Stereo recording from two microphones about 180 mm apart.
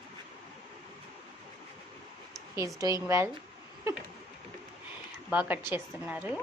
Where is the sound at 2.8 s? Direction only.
20° right (ahead or behind).